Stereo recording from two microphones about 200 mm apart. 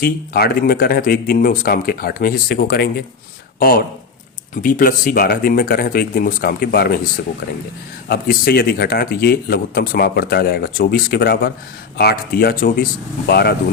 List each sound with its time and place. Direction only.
0.0 s speech: 50° left (ahead or behind)
8.0 s speech: 50° left (ahead or behind)